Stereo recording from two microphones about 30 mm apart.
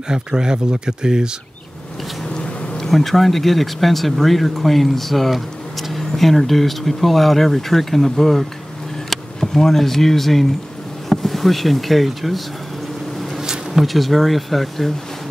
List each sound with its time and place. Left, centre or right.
0.1 s speech: right
2.8 s speech: centre
13.4 s bee: centre
13.8 s speech: centre